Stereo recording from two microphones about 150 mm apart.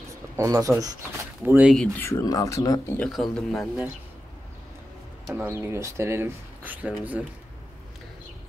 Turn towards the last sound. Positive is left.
turn(degrees=-10)  # may be behind; listen again after turning